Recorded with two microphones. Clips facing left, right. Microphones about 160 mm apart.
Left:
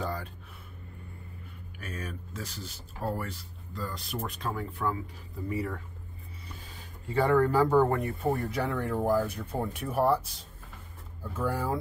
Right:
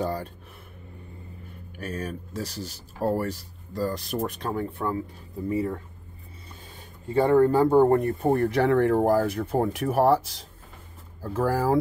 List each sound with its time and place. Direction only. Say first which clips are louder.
0.0 s a sound: right 6 dB; 35° right (ahead or behind)
1.8 s speech: right 7 dB; 35° right (ahead or behind)
7.2 s speech: right 5 dB; 25° right (ahead or behind)
7.9 s speech: right 7 dB; 45° right (ahead or behind)
8.5 s speech: right 10 dB; 80° right